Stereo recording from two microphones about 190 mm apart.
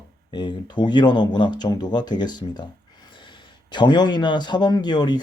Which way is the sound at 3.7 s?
25° left (ahead or behind).